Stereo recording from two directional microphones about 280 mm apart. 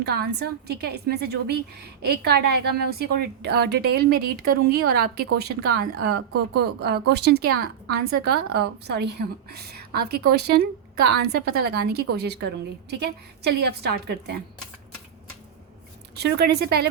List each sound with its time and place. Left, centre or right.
0.0 s a woman's voice: right
16.2 s a woman's voice: right